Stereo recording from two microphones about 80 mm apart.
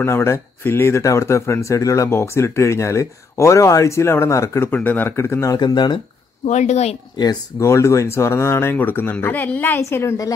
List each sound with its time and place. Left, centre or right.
0.0 s speech: left
4.6 s speech: left
5.6 s speech: left
7.5 s speech: left